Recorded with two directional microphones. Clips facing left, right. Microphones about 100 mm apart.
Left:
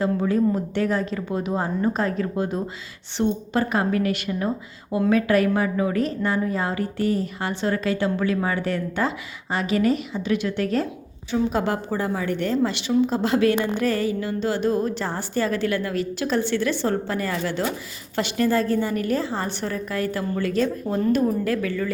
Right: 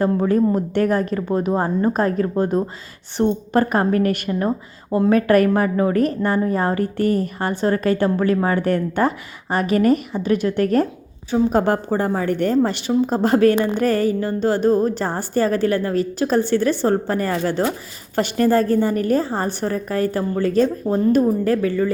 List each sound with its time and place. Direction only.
0.0 s a woman's voice: 50° right (ahead or behind)